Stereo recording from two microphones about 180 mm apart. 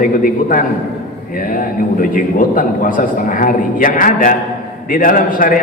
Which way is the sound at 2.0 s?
50° left (ahead or behind).